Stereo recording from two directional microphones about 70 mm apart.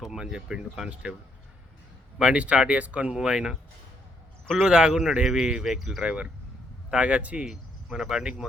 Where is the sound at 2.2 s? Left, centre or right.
Centre.